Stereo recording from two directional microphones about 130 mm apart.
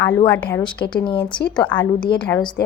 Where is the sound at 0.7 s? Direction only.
40° left (ahead or behind).